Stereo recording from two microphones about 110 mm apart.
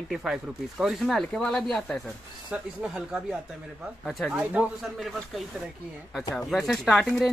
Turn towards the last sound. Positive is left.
turn(degrees=0)  # may be behind; listen again after turning